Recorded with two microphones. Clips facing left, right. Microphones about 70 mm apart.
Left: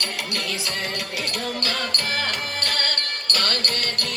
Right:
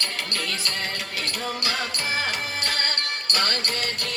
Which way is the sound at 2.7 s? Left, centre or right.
Centre.